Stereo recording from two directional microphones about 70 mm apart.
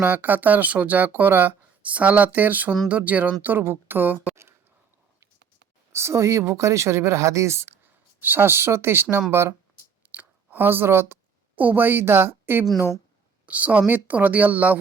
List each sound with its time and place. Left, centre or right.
0.0 s a woman's voice: right
5.9 s a woman's voice: right
10.1 s speech: right
13.4 s a woman's voice: right